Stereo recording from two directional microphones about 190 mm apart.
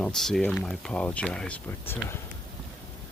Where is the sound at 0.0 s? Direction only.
Centre (ahead or behind).